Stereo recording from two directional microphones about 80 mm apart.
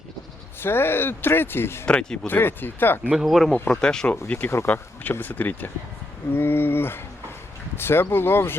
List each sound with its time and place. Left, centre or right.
0.6 s speech: left
1.9 s speech: centre
2.2 s speech: left
3.0 s speech: centre
3.2 s speech: centre
4.3 s speech: left